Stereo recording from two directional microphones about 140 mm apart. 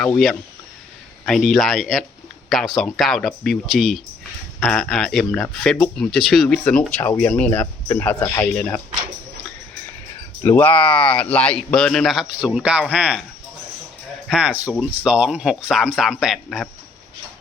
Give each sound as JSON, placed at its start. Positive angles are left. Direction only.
{"t": 1.2, "sound": "speech", "side_deg": 5}
{"t": 10.4, "sound": "speech", "side_deg": 15}
{"t": 14.3, "sound": "speech", "side_deg": -5}